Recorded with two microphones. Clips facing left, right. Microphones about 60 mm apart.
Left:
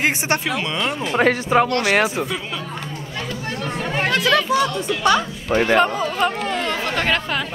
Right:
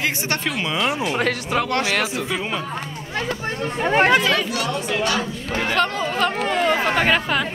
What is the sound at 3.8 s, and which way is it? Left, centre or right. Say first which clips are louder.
Speech: right 7 dB; right.